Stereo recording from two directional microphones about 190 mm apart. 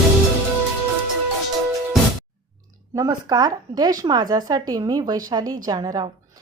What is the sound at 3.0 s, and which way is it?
A woman's voice, 20° right (ahead or behind).